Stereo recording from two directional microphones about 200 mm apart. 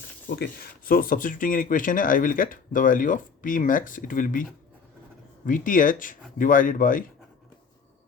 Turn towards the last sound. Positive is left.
turn(degrees=45)  # may be behind; listen again after turning